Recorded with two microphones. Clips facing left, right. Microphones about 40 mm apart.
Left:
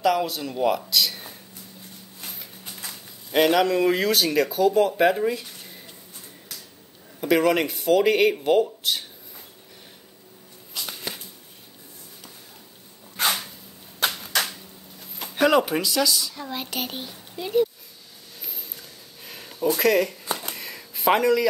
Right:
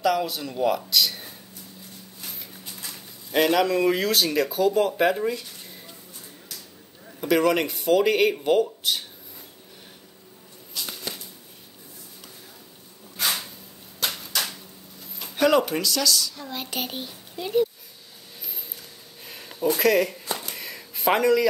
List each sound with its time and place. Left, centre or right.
0.0 s speech: centre
3.3 s speech: centre
7.2 s speech: centre
13.9 s a sound: left
15.3 s speech: centre
16.4 s speech: centre
18.5 s a sound: centre
19.8 s speech: centre
20.5 s a sound: centre